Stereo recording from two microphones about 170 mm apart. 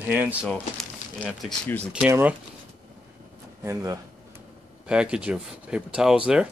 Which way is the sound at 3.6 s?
15° right (ahead or behind).